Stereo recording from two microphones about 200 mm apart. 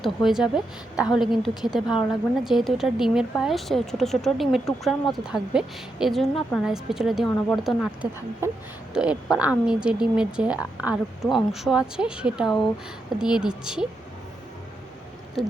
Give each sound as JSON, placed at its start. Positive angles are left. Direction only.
{"t": 0.0, "sound": "speech", "side_deg": 0}
{"t": 8.9, "sound": "speech", "side_deg": -5}